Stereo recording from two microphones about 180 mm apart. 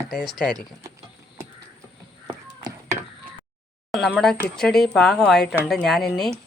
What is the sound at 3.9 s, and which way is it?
Speech, centre (ahead or behind).